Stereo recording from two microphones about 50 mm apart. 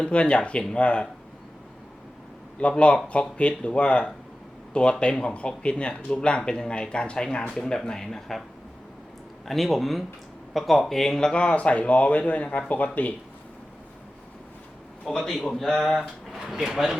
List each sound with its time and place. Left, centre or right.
0.0 s speech: left
2.6 s speech: left; by 8.4 s centre
9.5 s speech: centre; by 13.1 s left
15.0 s speech: centre